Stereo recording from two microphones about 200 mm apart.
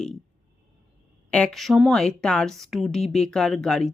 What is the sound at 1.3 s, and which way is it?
A woman's voice, 5° left (ahead or behind).